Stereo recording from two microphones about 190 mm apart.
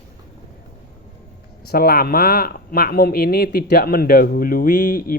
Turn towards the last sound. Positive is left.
turn(degrees=50)  # may be behind; listen again after turning